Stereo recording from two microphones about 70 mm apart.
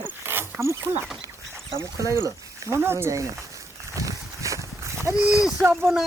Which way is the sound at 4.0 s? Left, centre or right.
Right.